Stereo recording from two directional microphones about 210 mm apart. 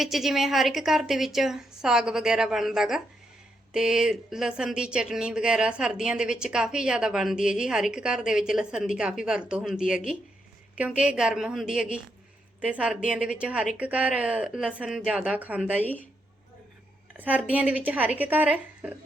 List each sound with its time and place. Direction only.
0.0 s speech: centre (ahead or behind)
17.2 s a woman's voice: 5° right (ahead or behind)